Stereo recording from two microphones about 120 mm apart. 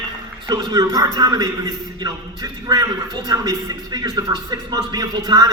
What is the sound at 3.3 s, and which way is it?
A man's voice, 30° right (ahead or behind).